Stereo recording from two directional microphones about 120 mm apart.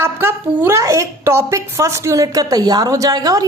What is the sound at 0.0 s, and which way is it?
A woman's voice, 20° right (ahead or behind).